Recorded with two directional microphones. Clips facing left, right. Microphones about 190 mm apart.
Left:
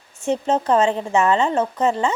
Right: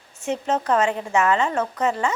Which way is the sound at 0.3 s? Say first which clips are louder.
Left 3 dB; 30° left (ahead or behind).